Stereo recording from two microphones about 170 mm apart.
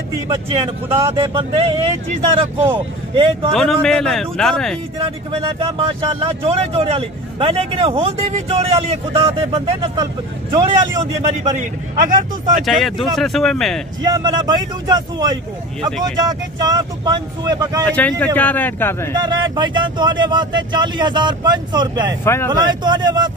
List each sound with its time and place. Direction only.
1.0 s speech: 35° right (ahead or behind)
3.5 s speech: centre (ahead or behind)
5.0 s speech: 35° right (ahead or behind)
10.5 s speech: 20° right (ahead or behind)
11.4 s speech: 50° right (ahead or behind)
12.6 s speech: centre (ahead or behind)
14.0 s speech: 25° right (ahead or behind)
17.8 s speech: 10° left (ahead or behind)
19.1 s speech: 25° right (ahead or behind)
22.2 s speech: 15° left (ahead or behind)
22.5 s speech: 25° right (ahead or behind)